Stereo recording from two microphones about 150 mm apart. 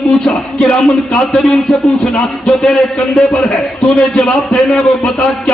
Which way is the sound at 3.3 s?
Centre (ahead or behind).